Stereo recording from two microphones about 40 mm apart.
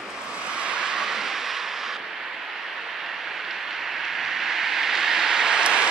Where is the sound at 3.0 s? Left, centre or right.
Centre.